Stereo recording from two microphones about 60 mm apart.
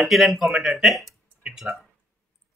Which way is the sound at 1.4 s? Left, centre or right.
Centre.